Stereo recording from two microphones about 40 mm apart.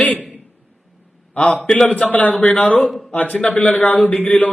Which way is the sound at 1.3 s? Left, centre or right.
Left.